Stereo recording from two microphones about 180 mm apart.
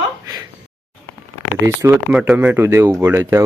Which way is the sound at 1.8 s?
15° right (ahead or behind).